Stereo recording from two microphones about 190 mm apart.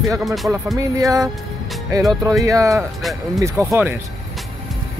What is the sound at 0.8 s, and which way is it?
Speech, 15° right (ahead or behind).